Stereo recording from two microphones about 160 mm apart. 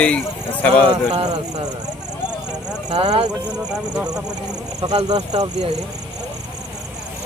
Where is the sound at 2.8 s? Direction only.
40° right (ahead or behind).